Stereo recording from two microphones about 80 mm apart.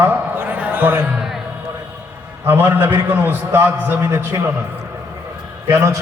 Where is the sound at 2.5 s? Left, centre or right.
Right.